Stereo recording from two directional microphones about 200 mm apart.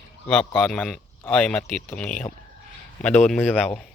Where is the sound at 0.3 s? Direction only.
5° left (ahead or behind).